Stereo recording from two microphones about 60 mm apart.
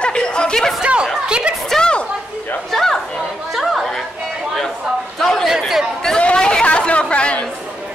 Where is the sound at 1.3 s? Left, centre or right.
Centre.